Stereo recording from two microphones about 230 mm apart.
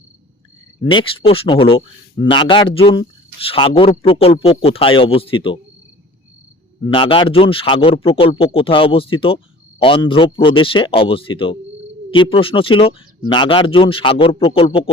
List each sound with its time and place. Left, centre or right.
0.9 s speech: left
6.8 s speech: left